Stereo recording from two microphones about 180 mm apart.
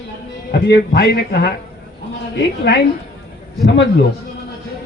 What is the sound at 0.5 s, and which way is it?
A man's voice, 65° left (ahead or behind).